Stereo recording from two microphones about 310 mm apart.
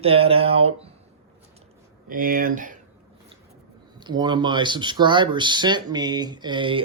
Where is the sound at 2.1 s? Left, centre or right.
Right.